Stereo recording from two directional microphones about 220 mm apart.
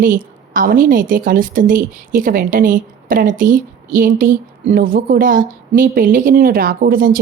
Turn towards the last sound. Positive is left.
turn(degrees=-40)  # may be behind; listen again after turning